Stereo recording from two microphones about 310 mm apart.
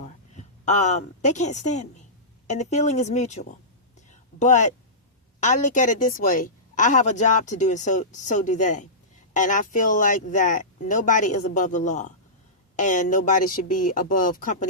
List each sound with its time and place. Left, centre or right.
0.0 s a woman's voice: left
4.1 s a sound: left
5.4 s a woman's voice: left